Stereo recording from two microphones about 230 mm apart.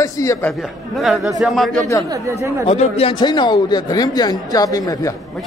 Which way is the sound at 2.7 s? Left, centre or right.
Left.